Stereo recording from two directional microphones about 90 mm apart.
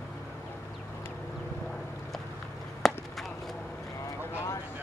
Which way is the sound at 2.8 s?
5° left (ahead or behind).